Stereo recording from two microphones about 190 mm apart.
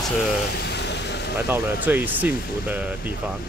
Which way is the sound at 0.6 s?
65° left (ahead or behind).